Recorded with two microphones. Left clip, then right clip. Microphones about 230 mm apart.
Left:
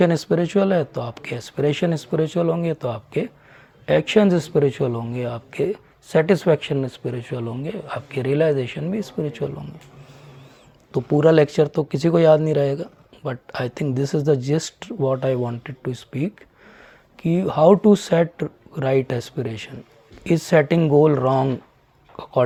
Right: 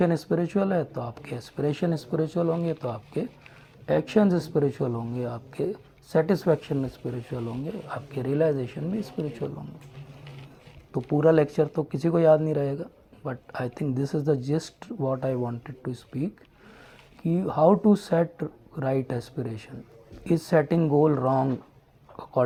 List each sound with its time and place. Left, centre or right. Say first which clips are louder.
0.0 s speech: left 6 dB; left
10.9 s speech: left 5 dB; left
22.1 s a sound: left 5 dB; left